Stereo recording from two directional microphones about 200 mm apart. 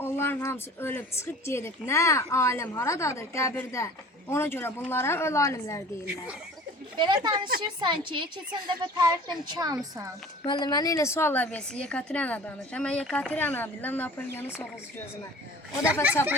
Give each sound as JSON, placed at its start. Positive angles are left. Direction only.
{"t": 0.0, "sound": "speech", "side_deg": 10}
{"t": 7.0, "sound": "speech", "side_deg": -20}
{"t": 10.4, "sound": "speech", "side_deg": 20}